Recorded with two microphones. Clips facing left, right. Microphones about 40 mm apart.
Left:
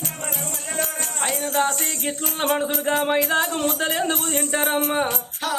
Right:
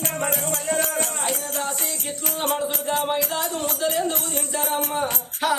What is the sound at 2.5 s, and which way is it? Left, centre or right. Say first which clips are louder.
Music: left 4 dB; left.